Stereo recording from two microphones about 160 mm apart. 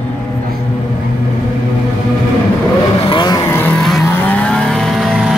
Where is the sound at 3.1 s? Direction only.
25° left (ahead or behind); by 4.0 s 5° left (ahead or behind).